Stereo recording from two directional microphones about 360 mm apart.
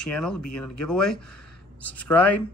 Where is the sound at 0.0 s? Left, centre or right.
Centre.